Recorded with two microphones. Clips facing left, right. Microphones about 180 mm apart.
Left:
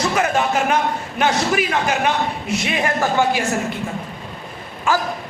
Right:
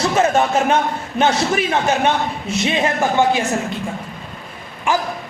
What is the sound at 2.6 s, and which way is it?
Speech, 25° right (ahead or behind).